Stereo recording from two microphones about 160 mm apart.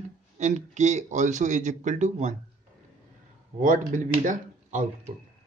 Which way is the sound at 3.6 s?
55° right (ahead or behind).